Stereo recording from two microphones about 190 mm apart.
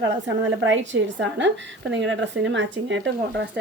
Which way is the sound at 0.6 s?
75° right (ahead or behind).